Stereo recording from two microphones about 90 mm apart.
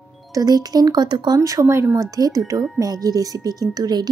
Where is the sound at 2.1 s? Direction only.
40° right (ahead or behind).